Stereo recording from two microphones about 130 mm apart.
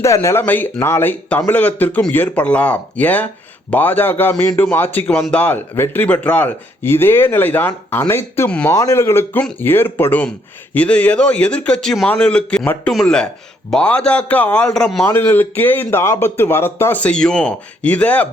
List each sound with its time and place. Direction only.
0.0 s speech: 20° left (ahead or behind)
8.4 s speech: 10° left (ahead or behind)
8.7 s speech: 25° left (ahead or behind); by 15.0 s 5° left (ahead or behind)
15.0 s speech: 15° left (ahead or behind)